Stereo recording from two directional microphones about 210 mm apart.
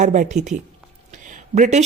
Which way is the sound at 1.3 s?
35° right (ahead or behind).